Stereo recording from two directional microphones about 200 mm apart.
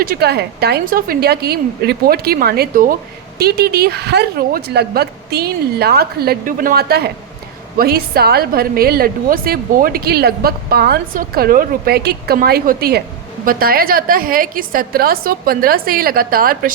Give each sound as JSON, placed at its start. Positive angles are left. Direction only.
{"t": 0.0, "sound": "a woman's voice", "side_deg": -50}